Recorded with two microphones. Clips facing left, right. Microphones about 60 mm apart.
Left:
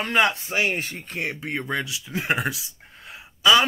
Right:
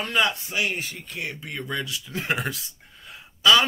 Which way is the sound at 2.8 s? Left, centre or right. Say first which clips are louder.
Left 2 dB; left.